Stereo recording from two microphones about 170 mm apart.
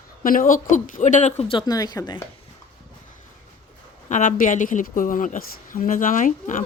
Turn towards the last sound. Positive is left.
turn(degrees=50)  # may be behind; listen again after turning